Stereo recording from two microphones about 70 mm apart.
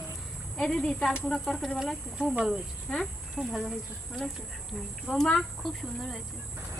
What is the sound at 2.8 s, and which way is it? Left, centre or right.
Speech, centre.